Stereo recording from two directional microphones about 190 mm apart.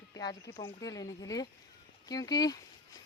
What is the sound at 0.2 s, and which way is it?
A woman's voice, 20° left (ahead or behind).